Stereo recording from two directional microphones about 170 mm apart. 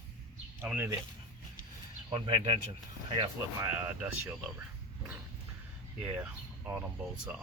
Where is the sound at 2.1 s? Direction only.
30° right (ahead or behind).